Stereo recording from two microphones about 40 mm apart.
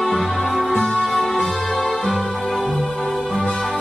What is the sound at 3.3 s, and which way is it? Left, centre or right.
Music, centre.